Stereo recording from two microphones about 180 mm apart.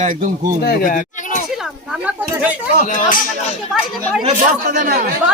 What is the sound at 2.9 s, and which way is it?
Speech, 45° left (ahead or behind).